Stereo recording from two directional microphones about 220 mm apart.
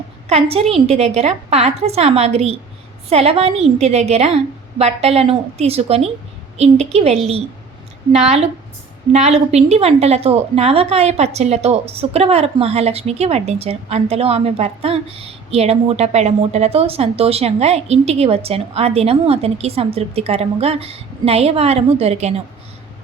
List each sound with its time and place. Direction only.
0.3 s a woman's voice: 25° right (ahead or behind)